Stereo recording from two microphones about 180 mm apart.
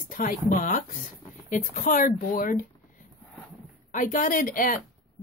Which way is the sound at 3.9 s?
45° left (ahead or behind).